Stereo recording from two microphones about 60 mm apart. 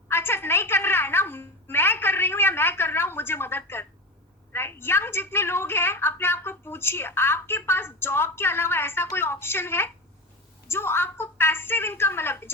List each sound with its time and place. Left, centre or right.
0.1 s a woman's voice: left